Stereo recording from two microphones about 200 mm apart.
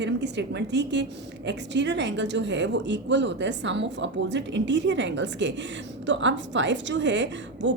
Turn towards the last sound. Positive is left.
turn(degrees=-65)  # may be behind; listen again after turning